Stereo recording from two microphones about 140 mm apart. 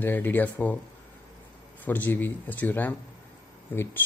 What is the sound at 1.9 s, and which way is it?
Speech, 10° left (ahead or behind).